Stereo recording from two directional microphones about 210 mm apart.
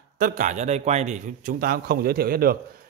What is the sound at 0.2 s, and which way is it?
A man's voice, 35° right (ahead or behind).